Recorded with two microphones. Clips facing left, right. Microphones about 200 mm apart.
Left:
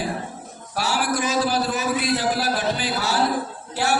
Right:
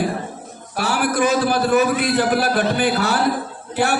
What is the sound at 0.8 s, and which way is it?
Speech, 55° right (ahead or behind).